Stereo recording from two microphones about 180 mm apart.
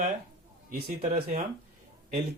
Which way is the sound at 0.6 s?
60° right (ahead or behind).